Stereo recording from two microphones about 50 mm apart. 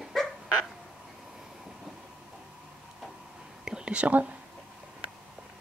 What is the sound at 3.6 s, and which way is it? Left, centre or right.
Whispering, centre.